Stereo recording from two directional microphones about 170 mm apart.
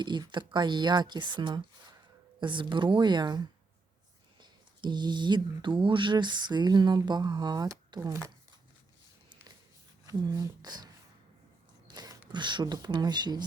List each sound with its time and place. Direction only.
0.0 s speech: 25° right (ahead or behind)
10.1 s speech: 20° right (ahead or behind)
11.9 s a sound: 20° right (ahead or behind)
12.3 s speech: 25° right (ahead or behind)